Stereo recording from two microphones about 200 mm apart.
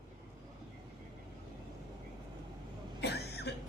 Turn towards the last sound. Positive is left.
turn(degrees=55)  # may be behind; listen again after turning